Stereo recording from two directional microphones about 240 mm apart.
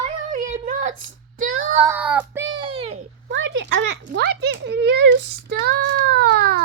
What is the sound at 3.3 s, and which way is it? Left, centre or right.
A child's voice, right.